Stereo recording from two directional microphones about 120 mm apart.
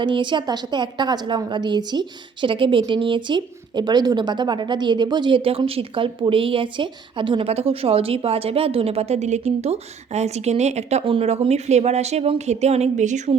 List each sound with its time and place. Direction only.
0.0 s a woman's voice: 40° right (ahead or behind); by 11.0 s 65° right (ahead or behind)
11.0 s a woman's voice: 50° right (ahead or behind); by 13.3 s 80° right